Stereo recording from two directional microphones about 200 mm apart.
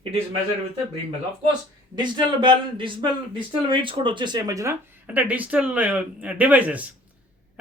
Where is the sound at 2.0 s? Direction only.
25° right (ahead or behind).